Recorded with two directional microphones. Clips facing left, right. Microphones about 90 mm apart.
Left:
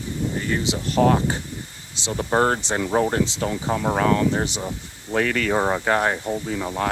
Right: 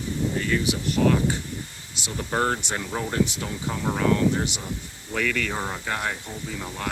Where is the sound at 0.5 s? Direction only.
35° left (ahead or behind).